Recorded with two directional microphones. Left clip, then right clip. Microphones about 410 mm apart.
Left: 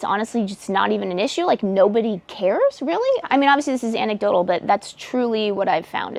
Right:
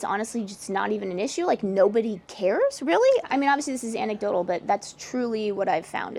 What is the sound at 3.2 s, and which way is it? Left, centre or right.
A woman's voice, left.